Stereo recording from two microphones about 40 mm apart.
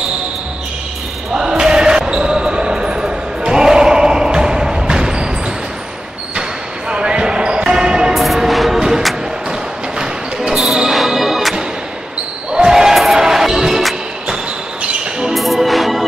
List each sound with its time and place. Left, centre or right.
1.3 s basketball bounce: centre
6.9 s basketball bounce: right
8.1 s music: centre
9.9 s a sound: right
10.9 s music: centre
12.5 s basketball bounce: centre
15.3 s music: centre